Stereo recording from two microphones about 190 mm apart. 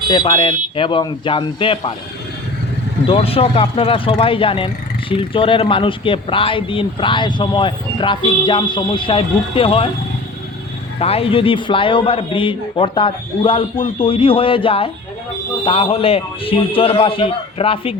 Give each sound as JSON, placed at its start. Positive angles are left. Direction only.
{"t": 0.1, "sound": "speech", "side_deg": 25}
{"t": 3.1, "sound": "speech", "side_deg": 30}
{"t": 11.0, "sound": "speech", "side_deg": 30}